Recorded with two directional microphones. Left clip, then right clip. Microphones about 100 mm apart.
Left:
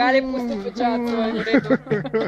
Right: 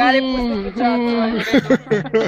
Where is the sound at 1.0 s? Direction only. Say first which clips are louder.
Right 4 dB; 40° right (ahead or behind).